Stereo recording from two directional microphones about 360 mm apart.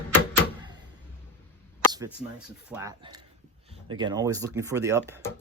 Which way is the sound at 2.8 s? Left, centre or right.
Centre.